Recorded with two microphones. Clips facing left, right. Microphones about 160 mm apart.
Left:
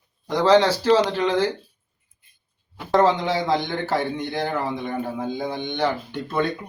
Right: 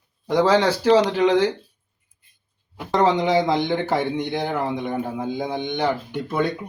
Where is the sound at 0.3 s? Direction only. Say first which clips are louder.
Left 1 dB; 10° right (ahead or behind).